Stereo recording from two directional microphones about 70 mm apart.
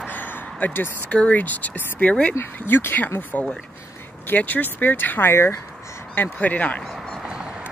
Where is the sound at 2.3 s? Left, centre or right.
Left.